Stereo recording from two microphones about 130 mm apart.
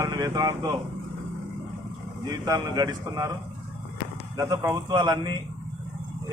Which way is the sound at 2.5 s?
30° right (ahead or behind).